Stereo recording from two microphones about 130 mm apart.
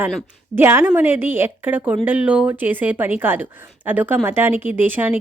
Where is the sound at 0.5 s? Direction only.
20° right (ahead or behind).